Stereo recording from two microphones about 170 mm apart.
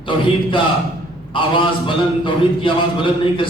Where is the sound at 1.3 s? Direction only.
30° left (ahead or behind).